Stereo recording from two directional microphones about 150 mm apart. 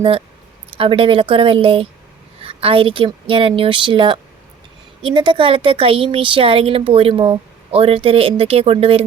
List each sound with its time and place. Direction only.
0.8 s a woman's voice: 35° right (ahead or behind)